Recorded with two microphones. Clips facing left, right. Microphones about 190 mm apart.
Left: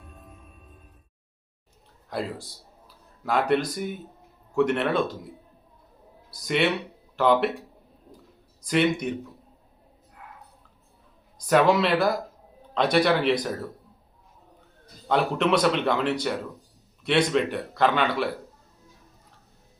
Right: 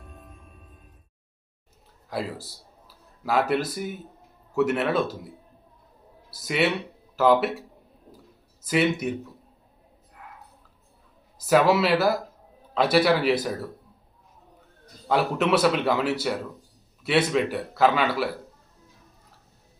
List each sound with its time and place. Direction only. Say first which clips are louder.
0.0 s music: right 1 dB; centre (ahead or behind)
2.0 s a man's voice: even; 5° right (ahead or behind)
6.3 s a man's voice: even; 5° right (ahead or behind)
8.6 s speech: even; 5° right (ahead or behind)
11.3 s a man's voice: even; 5° right (ahead or behind)
15.0 s a man's voice: even; 5° right (ahead or behind)